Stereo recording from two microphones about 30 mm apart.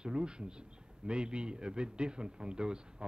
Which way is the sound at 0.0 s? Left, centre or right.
Right.